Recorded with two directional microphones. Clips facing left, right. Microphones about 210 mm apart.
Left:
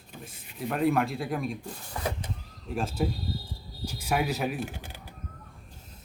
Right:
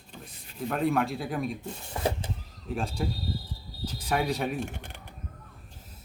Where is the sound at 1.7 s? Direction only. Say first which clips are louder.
Right 3 dB; 25° right (ahead or behind).